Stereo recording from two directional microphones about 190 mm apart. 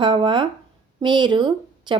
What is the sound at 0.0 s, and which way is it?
Speech, 25° right (ahead or behind).